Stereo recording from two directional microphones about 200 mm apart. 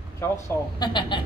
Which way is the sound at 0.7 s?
25° left (ahead or behind).